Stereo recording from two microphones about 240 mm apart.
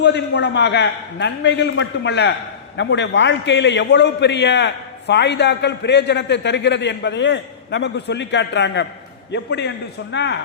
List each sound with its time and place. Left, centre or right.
0.0 s a man's voice: left